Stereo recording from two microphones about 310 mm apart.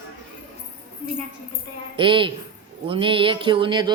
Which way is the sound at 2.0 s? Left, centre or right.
Centre.